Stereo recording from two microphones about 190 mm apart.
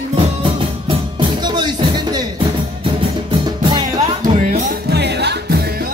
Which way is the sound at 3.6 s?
20° right (ahead or behind).